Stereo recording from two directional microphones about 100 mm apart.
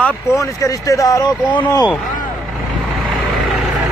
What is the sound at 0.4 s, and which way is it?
Speech, 35° left (ahead or behind).